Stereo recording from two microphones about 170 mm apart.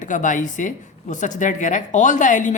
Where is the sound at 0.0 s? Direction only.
50° left (ahead or behind).